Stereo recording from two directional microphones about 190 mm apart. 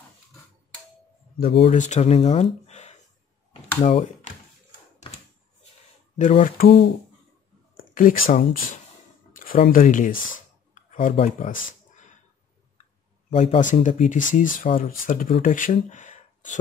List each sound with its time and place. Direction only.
1.4 s speech: 60° left (ahead or behind)
1.7 s speech: 40° left (ahead or behind)
6.1 s speech: 40° left (ahead or behind)
7.7 s speech: 45° left (ahead or behind)
9.3 s a sound: 45° left (ahead or behind)
9.7 s speech: 45° left (ahead or behind)
13.3 s speech: 40° left (ahead or behind)